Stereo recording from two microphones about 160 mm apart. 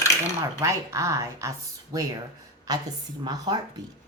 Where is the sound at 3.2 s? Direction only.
25° right (ahead or behind).